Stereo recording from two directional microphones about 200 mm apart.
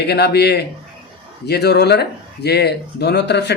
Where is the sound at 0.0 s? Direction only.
55° left (ahead or behind).